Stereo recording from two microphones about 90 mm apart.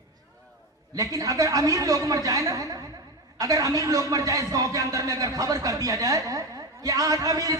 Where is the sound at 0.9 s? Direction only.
40° right (ahead or behind).